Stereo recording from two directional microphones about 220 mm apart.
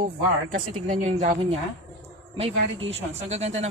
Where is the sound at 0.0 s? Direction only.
35° right (ahead or behind).